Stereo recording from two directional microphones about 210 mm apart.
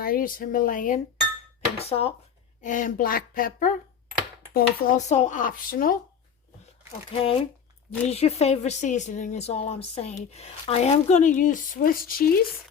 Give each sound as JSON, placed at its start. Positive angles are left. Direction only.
{"t": 0.0, "sound": "a woman's voice", "side_deg": 40}
{"t": 1.8, "sound": "a woman's voice", "side_deg": 30}
{"t": 7.2, "sound": "a woman's voice", "side_deg": 25}